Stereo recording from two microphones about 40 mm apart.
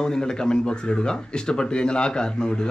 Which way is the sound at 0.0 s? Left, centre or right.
Centre.